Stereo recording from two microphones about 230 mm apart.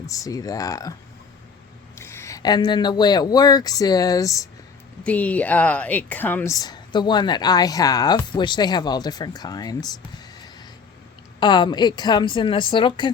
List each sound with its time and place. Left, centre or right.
0.0 s speech: centre
2.0 s speech: centre
11.3 s a woman's voice: centre